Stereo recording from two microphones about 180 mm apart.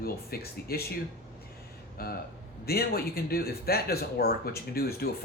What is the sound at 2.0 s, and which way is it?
Speech, 60° left (ahead or behind).